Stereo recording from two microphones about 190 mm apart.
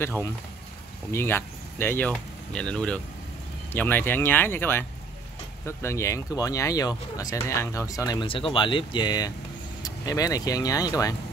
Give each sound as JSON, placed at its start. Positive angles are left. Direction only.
{"t": 0.0, "sound": "speech", "side_deg": 15}